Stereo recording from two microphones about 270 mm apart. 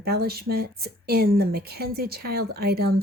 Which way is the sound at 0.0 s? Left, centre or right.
Right.